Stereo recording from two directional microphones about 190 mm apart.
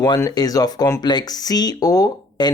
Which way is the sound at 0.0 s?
20° left (ahead or behind).